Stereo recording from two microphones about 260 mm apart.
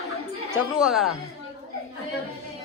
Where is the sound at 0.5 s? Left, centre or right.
Centre.